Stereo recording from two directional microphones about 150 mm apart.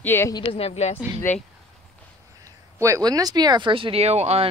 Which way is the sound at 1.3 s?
15° left (ahead or behind).